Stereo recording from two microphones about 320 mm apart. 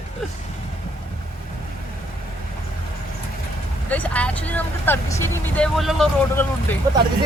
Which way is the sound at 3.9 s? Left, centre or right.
Centre.